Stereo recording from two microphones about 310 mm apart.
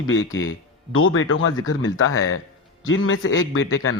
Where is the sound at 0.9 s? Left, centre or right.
Left.